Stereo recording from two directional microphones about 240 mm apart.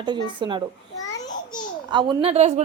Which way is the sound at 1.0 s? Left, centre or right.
Centre.